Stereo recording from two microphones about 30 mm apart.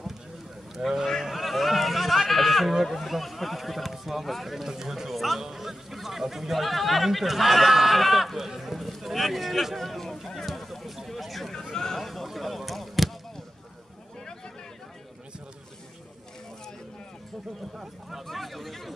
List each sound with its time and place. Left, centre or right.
0.7 s speech: centre
1.3 s a sound: centre
2.2 s sheep: centre
2.8 s speech: centre
4.6 s a man's voice: centre
5.1 s a man's voice: centre
11.7 s speech: centre
12.0 s speech: centre
18.3 s speech: centre